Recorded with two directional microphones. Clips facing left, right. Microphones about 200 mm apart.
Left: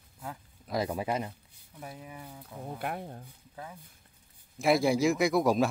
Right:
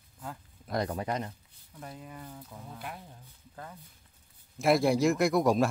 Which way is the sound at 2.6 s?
60° left (ahead or behind).